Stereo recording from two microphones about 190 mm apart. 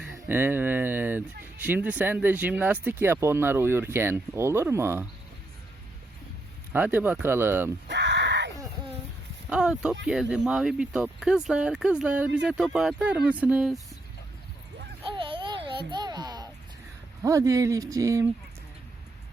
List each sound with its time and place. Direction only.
0.0 s speech: 5° right (ahead or behind)
6.7 s speech: 10° right (ahead or behind)
7.9 s a sound: 65° right (ahead or behind)
9.5 s speech: 5° right (ahead or behind)
15.1 s babbling: 25° right (ahead or behind)
17.2 s speech: 15° right (ahead or behind)